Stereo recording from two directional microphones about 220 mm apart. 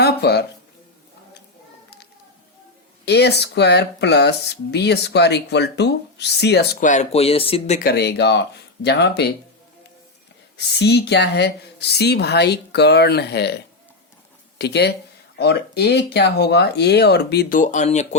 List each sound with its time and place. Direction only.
0.0 s a sound: 45° left (ahead or behind)
3.1 s speech: 50° left (ahead or behind)
6.8 s speech: 30° left (ahead or behind)
7.8 s speech: 45° left (ahead or behind)
10.7 s speech: 50° left (ahead or behind)
14.6 s speech: 50° left (ahead or behind); by 18.2 s 30° left (ahead or behind)